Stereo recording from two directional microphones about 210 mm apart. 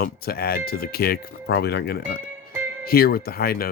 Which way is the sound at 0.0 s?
45° left (ahead or behind).